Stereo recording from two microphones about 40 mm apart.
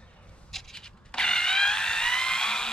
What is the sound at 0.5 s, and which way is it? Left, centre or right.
Tools, centre.